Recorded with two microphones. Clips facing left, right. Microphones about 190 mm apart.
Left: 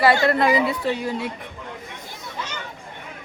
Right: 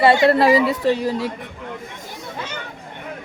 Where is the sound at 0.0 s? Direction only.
25° right (ahead or behind).